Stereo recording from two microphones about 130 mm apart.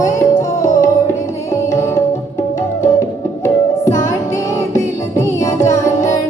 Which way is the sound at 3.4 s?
25° left (ahead or behind).